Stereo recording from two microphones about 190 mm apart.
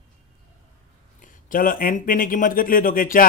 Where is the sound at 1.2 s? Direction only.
45° left (ahead or behind).